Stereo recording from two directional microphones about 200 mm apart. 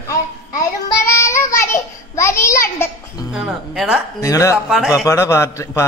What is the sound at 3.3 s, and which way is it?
Speech, 5° right (ahead or behind).